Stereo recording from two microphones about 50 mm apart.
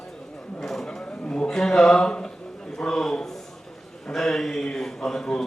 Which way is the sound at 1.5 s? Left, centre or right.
Centre.